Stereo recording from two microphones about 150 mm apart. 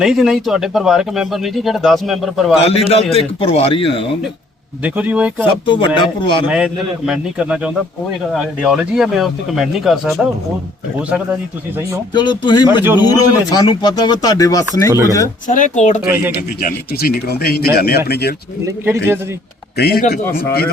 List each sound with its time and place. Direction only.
0.0 s speech: 5° right (ahead or behind)
2.6 s a man's voice: 40° left (ahead or behind)
4.8 s a man's voice: 10° right (ahead or behind)
5.5 s a man's voice: 35° left (ahead or behind)
6.5 s a man's voice: 5° right (ahead or behind)
12.1 s a man's voice: 30° left (ahead or behind)
15.4 s speech: 60° left (ahead or behind)
16.6 s speech: 85° left
18.6 s a man's voice: 15° right (ahead or behind)
19.7 s speech: 90° left